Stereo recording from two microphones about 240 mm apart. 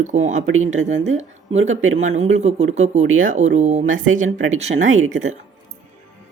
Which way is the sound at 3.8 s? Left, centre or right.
Right.